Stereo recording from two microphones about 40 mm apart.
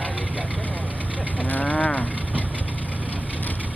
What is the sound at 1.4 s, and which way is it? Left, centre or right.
Cattle, left.